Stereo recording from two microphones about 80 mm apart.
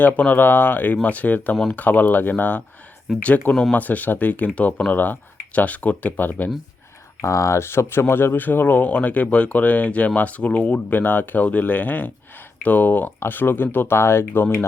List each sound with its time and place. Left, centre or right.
0.0 s speech: left
7.2 s speech: left